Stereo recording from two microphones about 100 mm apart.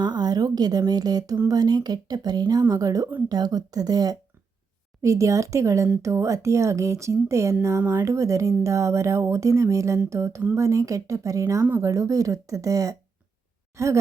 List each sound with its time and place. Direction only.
0.0 s a woman's voice: 45° right (ahead or behind)
6.0 s music: 30° right (ahead or behind)
10.5 s speech: 30° right (ahead or behind)